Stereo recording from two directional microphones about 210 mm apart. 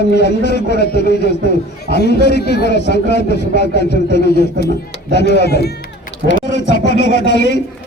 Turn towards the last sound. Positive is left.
turn(degrees=55)  # may be behind; listen again after turning